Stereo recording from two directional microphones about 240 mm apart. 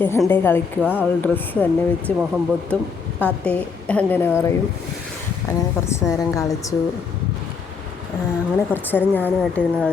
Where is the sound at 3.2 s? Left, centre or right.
Centre.